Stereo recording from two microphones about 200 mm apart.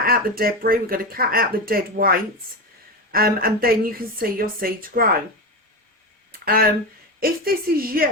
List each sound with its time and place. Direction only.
0.0 s speech: 50° right (ahead or behind)
6.4 s speech: 50° right (ahead or behind)